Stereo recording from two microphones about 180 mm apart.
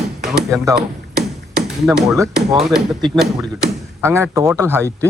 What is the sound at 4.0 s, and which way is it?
Speech, 15° right (ahead or behind).